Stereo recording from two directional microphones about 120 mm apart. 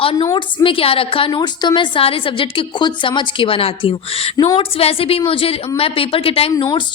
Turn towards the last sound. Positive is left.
turn(degrees=50)  # may be behind; listen again after turning